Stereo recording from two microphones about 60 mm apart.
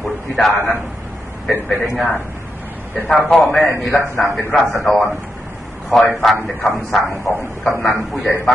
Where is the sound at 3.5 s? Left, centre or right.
Left.